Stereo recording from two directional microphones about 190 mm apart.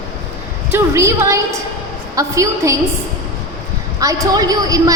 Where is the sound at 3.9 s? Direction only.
20° right (ahead or behind).